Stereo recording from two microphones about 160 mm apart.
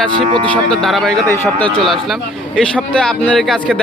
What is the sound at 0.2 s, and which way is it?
Speech, 30° right (ahead or behind).